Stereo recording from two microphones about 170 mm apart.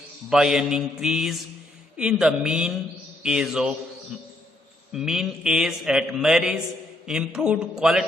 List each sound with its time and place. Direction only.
0.3 s mantra: 5° right (ahead or behind)
4.9 s mantra: 5° right (ahead or behind)